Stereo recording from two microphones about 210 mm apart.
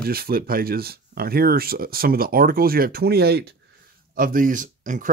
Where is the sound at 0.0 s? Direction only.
45° right (ahead or behind).